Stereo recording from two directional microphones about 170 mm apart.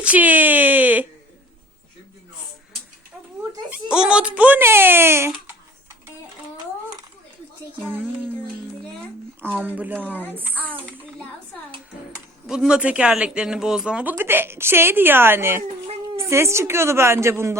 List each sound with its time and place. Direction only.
0.0 s a sound: 10° right (ahead or behind)
3.7 s speech: 5° right (ahead or behind)
9.4 s speech: 10° right (ahead or behind)
10.5 s a child's voice: 10° left (ahead or behind)
12.5 s speech: 5° right (ahead or behind)